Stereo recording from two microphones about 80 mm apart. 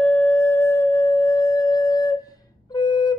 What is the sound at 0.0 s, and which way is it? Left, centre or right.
Singing bowl, left.